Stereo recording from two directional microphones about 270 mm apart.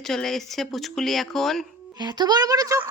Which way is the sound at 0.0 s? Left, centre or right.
Centre.